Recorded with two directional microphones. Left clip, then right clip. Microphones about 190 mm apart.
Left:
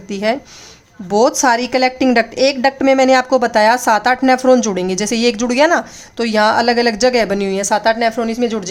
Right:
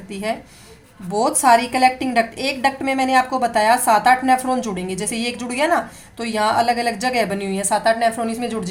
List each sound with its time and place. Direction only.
0.1 s speech: 40° left (ahead or behind)
1.4 s a woman's voice: 40° left (ahead or behind)